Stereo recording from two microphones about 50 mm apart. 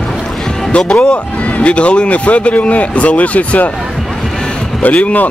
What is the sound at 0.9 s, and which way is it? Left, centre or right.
Speech, centre.